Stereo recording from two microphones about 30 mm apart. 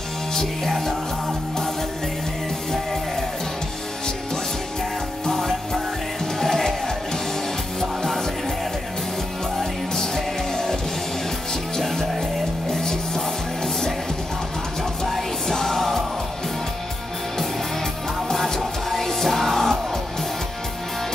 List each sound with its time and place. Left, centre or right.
0.3 s music: centre
5.3 s music: centre
9.6 s music: centre
12.7 s music: centre
15.0 s music: centre
18.6 s music: centre